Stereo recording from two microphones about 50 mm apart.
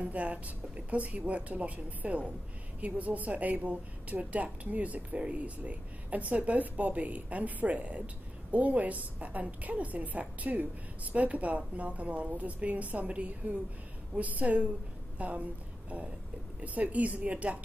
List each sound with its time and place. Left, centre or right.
0.0 s a woman's voice: right
16.6 s a woman's voice: right